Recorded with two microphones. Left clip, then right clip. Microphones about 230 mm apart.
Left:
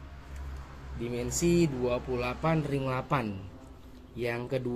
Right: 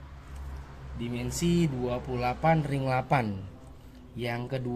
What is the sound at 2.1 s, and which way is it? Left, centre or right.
Speech, centre.